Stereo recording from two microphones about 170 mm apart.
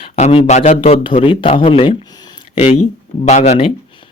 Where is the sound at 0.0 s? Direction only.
35° left (ahead or behind).